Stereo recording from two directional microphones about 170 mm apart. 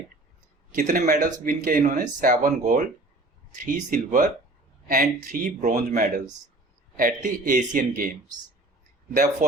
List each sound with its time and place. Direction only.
0.8 s speech: 50° right (ahead or behind)
9.1 s speech: 50° right (ahead or behind)